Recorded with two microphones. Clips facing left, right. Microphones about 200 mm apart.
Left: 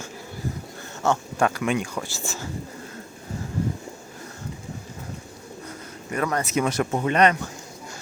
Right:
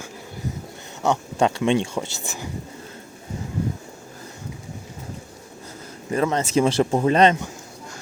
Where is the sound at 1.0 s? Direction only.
20° right (ahead or behind).